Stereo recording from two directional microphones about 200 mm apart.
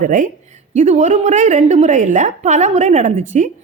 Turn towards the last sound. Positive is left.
turn(degrees=-35)  # may be behind; listen again after turning